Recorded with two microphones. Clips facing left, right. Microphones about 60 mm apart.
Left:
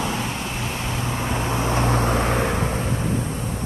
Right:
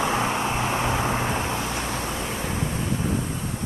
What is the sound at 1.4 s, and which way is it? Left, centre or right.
Vehicle, left.